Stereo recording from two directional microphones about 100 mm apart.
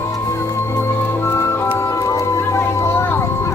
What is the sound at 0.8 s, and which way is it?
Music, 25° left (ahead or behind).